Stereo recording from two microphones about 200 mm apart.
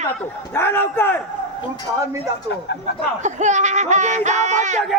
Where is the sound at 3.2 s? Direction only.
35° right (ahead or behind).